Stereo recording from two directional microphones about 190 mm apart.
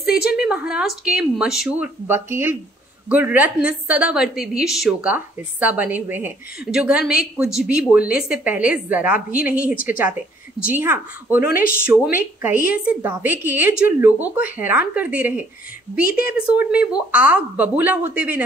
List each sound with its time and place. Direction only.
0.1 s a woman's voice: 5° right (ahead or behind)
16.1 s a woman's voice: 50° left (ahead or behind)
16.3 s a woman's voice: 5° right (ahead or behind)